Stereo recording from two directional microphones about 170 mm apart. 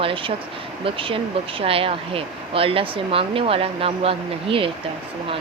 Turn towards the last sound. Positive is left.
turn(degrees=-30)  # may be behind; listen again after turning